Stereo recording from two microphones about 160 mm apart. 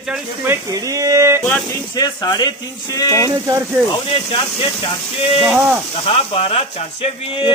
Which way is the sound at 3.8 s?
25° left (ahead or behind).